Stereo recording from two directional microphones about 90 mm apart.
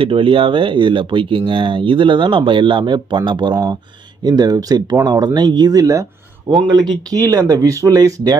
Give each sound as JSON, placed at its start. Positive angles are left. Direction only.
{"t": 0.0, "sound": "speech", "side_deg": -75}
{"t": 6.5, "sound": "speech", "side_deg": -55}